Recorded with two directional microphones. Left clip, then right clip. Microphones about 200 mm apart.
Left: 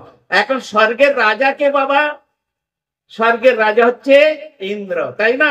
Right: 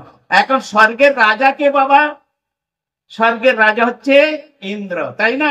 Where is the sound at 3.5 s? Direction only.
20° right (ahead or behind).